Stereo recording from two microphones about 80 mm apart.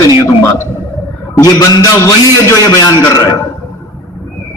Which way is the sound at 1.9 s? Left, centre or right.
Left.